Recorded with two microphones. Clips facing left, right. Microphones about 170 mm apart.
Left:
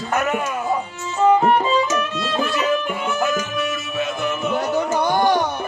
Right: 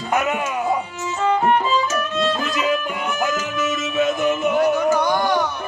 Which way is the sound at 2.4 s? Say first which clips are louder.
Left 1 dB; 15° right (ahead or behind).